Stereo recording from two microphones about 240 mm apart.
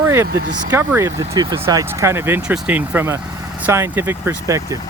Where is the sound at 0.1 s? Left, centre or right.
Centre.